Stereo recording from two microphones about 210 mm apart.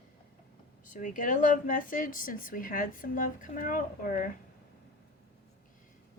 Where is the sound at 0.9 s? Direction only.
40° left (ahead or behind).